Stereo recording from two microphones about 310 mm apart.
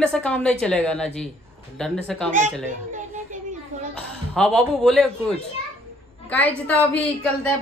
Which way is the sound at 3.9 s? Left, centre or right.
Centre.